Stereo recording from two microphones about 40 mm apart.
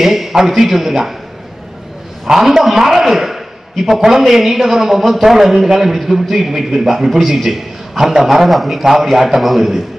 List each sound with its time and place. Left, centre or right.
0.0 s a man's voice: centre
2.2 s a man's voice: centre